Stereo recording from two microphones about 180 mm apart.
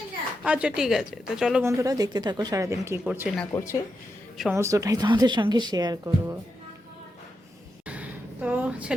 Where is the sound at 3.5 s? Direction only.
15° left (ahead or behind).